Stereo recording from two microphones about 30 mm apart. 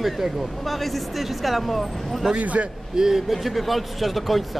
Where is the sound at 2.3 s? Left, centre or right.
Right.